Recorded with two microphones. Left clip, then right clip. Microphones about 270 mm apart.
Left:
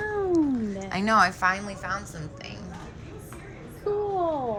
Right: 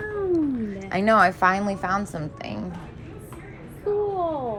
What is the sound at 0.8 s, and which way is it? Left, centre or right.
Speech, centre.